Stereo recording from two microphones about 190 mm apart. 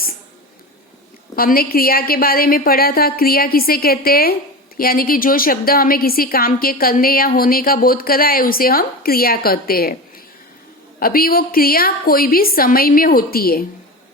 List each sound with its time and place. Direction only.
1.4 s a woman's voice: 50° left (ahead or behind)
11.0 s a woman's voice: 50° left (ahead or behind)